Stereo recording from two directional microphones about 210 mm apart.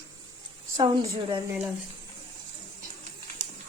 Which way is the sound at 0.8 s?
20° right (ahead or behind).